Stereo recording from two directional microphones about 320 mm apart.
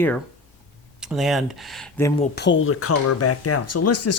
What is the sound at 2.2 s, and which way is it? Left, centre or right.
Speech, left.